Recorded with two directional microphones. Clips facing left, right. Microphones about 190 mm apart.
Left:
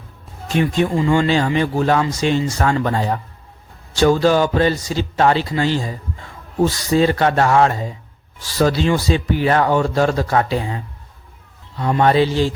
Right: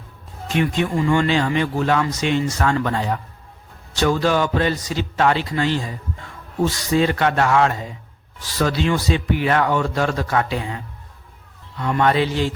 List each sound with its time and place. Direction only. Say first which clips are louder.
0.4 s speech: left 3 dB; 35° left (ahead or behind)
11.8 s speech: left 3 dB; 30° left (ahead or behind)